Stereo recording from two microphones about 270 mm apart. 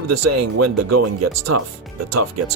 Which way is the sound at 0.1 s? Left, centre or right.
Right.